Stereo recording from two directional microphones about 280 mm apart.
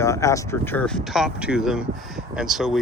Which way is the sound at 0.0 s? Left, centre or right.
Centre.